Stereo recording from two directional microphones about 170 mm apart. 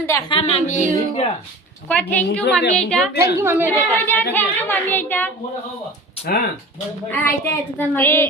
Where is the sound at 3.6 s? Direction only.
10° left (ahead or behind).